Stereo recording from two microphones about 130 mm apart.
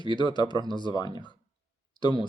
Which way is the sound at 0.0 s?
40° left (ahead or behind).